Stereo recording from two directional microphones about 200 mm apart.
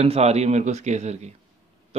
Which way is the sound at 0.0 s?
30° right (ahead or behind).